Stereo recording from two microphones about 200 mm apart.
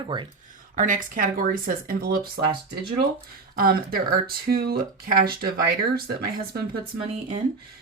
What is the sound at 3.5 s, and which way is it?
Speech, 45° right (ahead or behind).